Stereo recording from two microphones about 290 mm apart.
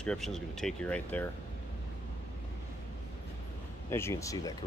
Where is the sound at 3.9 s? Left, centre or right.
Centre.